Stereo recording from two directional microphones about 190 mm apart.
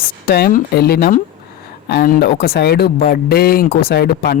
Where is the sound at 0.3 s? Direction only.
50° left (ahead or behind).